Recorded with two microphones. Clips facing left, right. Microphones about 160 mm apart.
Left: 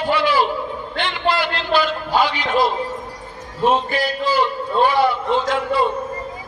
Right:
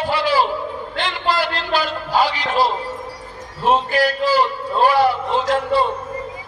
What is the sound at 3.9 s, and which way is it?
A man's voice, 35° right (ahead or behind).